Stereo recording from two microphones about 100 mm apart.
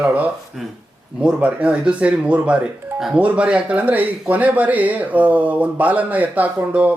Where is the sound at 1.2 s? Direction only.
10° right (ahead or behind).